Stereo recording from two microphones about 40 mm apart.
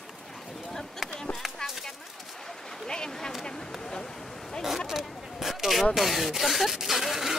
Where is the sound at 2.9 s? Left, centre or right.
Centre.